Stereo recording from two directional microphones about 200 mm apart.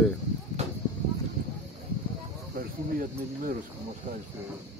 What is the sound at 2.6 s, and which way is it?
Speech, 45° right (ahead or behind).